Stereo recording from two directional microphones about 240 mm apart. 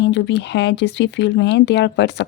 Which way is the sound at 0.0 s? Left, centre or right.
Left.